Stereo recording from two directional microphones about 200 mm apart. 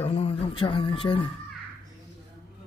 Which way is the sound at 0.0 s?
30° left (ahead or behind).